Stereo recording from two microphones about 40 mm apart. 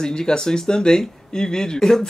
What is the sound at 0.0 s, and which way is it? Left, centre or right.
Speech, centre.